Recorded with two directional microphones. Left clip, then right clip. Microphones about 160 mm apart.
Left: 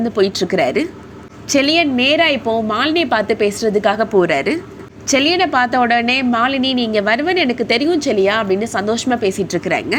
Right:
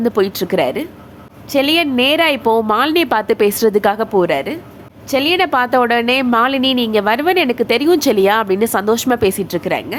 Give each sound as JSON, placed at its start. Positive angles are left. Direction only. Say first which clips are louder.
{"t": 0.2, "sound": "a woman's voice", "louder": "left 3 dB", "side_deg": -15}
{"t": 3.9, "sound": "speech", "louder": "left 1 dB", "side_deg": -15}
{"t": 5.4, "sound": "a woman's voice", "louder": "right 1 dB", "side_deg": -20}
{"t": 7.9, "sound": "a woman's voice", "louder": "right 2 dB", "side_deg": -30}
{"t": 9.4, "sound": "speech", "louder": "left 1 dB", "side_deg": -10}